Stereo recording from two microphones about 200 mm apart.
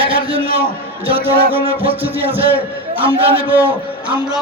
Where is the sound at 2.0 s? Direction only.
10° right (ahead or behind).